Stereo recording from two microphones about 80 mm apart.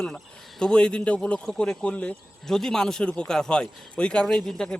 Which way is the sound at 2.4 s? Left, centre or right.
Centre.